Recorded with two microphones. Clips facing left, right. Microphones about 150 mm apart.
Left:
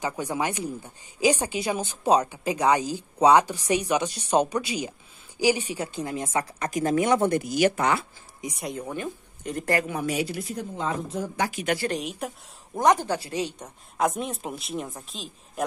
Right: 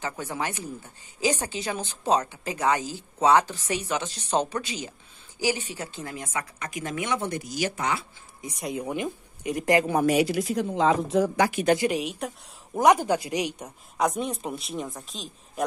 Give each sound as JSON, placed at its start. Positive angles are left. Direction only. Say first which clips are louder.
{"t": 0.0, "sound": "a woman's voice", "louder": "left 3 dB", "side_deg": 15}
{"t": 8.5, "sound": "speech", "louder": "right 3 dB", "side_deg": 0}
{"t": 8.8, "sound": "speech", "louder": "right 2 dB", "side_deg": -15}
{"t": 10.0, "sound": "speech", "louder": "right 6 dB", "side_deg": -80}
{"t": 11.9, "sound": "speech", "louder": "right 1 dB", "side_deg": 0}
{"t": 12.7, "sound": "speech", "louder": "right 2 dB", "side_deg": -10}
{"t": 13.9, "sound": "speech", "louder": "even", "side_deg": 0}